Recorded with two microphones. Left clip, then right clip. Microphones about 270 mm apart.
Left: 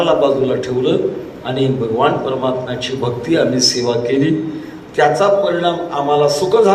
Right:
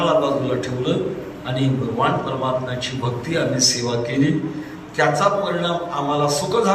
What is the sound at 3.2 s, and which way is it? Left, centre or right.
A man's voice, centre.